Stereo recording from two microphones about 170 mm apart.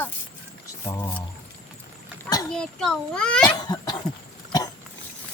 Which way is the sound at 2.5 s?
5° left (ahead or behind).